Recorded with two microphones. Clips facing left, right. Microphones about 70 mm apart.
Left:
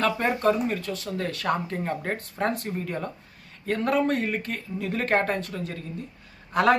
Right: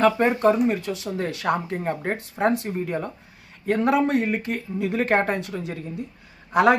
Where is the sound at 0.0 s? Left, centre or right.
Centre.